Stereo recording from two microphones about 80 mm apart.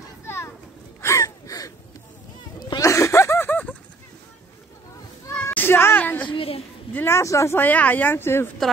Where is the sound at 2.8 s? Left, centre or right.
Left.